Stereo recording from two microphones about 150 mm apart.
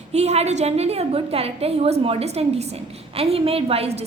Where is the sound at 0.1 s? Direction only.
45° right (ahead or behind).